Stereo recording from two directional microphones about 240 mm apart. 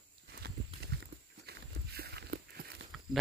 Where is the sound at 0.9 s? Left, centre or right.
Right.